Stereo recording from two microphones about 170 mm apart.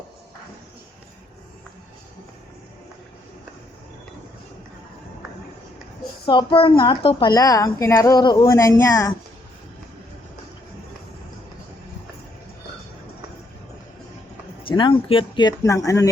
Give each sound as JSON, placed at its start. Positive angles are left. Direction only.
{"t": 6.2, "sound": "a woman's voice", "side_deg": 30}
{"t": 14.7, "sound": "a woman's voice", "side_deg": 30}